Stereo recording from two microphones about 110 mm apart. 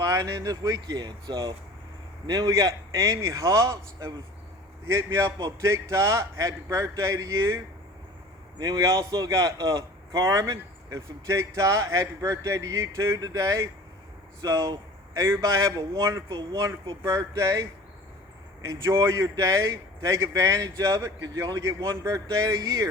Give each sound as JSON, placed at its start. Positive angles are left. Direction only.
{"t": 0.0, "sound": "a man's voice", "side_deg": -30}
{"t": 16.3, "sound": "speech", "side_deg": -40}
{"t": 17.0, "sound": "a man's voice", "side_deg": -30}